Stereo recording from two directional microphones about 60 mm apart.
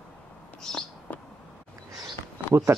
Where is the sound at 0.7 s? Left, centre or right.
Centre.